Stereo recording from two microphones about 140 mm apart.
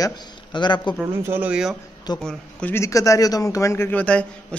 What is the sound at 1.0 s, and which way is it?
Speech, 15° right (ahead or behind).